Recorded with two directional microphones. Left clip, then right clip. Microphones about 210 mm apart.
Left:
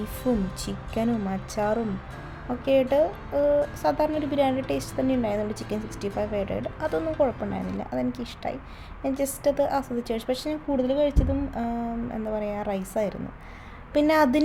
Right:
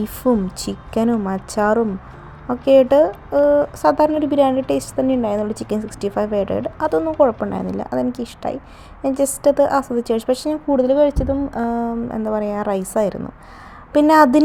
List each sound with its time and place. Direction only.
0.2 s a woman's voice: 30° right (ahead or behind)